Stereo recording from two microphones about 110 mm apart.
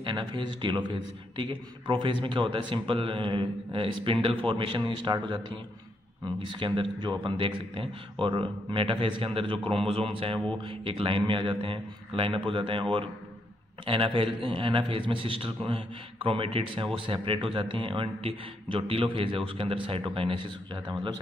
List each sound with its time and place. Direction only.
0.0 s a man's voice: 45° right (ahead or behind)